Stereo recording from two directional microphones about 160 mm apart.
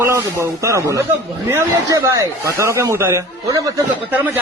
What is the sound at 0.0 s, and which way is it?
A man's voice, 15° right (ahead or behind).